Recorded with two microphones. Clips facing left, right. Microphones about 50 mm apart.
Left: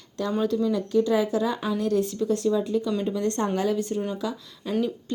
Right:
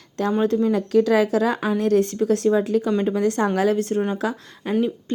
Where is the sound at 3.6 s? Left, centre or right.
Right.